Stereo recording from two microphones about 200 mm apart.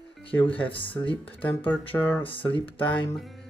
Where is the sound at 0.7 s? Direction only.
25° left (ahead or behind).